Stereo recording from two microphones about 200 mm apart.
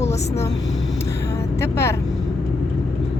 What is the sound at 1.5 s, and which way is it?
Speech, 15° left (ahead or behind).